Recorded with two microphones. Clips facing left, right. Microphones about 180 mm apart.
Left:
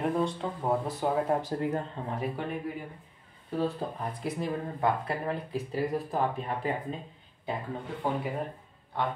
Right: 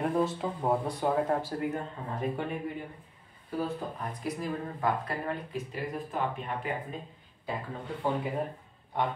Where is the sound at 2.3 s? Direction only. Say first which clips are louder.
Even; centre (ahead or behind).